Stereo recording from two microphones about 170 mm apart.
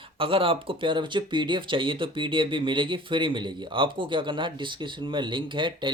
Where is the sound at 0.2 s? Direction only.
30° right (ahead or behind).